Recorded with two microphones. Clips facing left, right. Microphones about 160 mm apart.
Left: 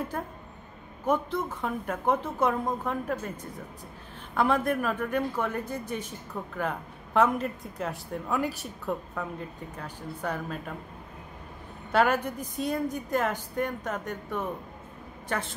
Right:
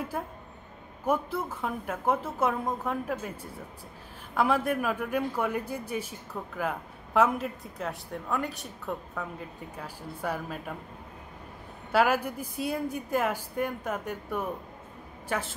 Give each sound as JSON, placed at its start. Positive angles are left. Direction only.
{"t": 1.0, "sound": "speech", "side_deg": -5}
{"t": 11.9, "sound": "a woman's voice", "side_deg": -5}